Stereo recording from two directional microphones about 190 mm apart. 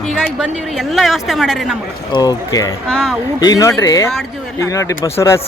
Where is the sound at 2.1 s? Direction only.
20° left (ahead or behind).